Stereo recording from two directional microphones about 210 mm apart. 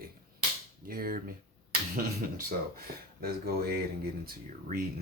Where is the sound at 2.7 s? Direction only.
45° right (ahead or behind).